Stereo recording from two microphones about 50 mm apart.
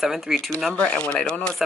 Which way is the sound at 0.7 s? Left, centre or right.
Centre.